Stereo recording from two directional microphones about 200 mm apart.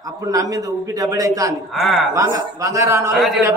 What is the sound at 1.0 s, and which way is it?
Speech, 15° right (ahead or behind).